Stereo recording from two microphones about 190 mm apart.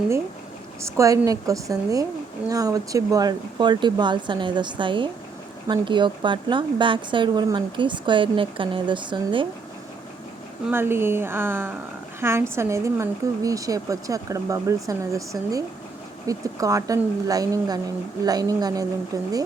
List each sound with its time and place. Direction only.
0.8 s a woman's voice: 15° right (ahead or behind)
10.7 s a woman's voice: 10° right (ahead or behind)